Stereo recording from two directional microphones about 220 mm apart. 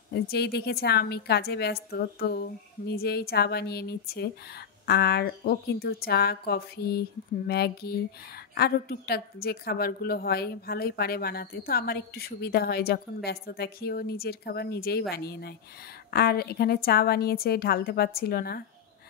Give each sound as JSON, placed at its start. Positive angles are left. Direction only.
{"t": 0.1, "sound": "a woman's voice", "side_deg": 45}